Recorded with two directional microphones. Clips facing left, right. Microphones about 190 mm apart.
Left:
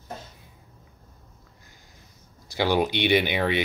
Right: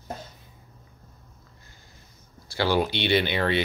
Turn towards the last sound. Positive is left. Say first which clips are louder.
# even
turn(degrees=15)  # may be behind; listen again after turning